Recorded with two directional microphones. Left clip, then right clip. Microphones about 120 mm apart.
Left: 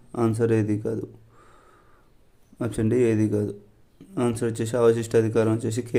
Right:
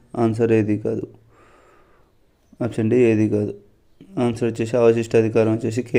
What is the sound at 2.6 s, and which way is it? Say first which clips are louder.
Speech: right 5 dB; 20° right (ahead or behind).